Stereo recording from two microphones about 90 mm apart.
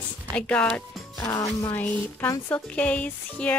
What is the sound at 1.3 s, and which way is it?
Music, 30° left (ahead or behind).